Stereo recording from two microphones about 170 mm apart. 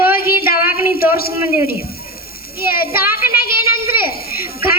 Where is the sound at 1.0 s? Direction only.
60° left (ahead or behind).